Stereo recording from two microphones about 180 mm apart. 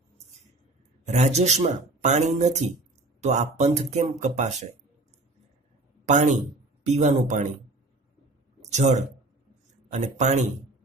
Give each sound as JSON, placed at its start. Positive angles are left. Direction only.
{"t": 1.0, "sound": "speech", "side_deg": -40}
{"t": 6.0, "sound": "speech", "side_deg": -40}
{"t": 8.7, "sound": "speech", "side_deg": -40}